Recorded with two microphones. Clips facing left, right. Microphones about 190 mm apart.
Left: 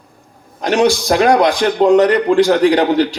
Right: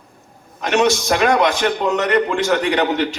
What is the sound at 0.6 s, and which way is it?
A man's voice, 35° left (ahead or behind).